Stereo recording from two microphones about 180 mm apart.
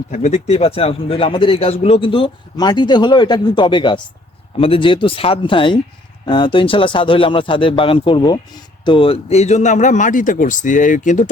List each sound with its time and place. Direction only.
0.1 s speech: 40° left (ahead or behind)